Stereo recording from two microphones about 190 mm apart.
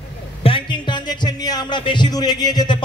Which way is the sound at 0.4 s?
25° left (ahead or behind).